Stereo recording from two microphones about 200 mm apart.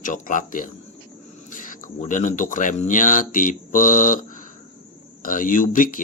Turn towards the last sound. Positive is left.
turn(degrees=40)  # may be behind; listen again after turning